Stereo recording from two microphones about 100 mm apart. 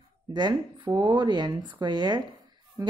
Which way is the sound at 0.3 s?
45° right (ahead or behind).